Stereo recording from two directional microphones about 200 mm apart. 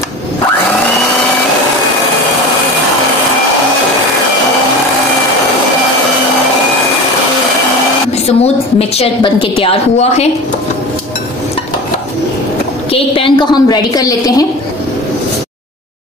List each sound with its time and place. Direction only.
8.3 s a woman's voice: 30° left (ahead or behind)
12.9 s a woman's voice: 25° left (ahead or behind)